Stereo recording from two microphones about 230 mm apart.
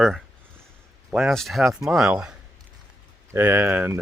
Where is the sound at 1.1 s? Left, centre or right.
Centre.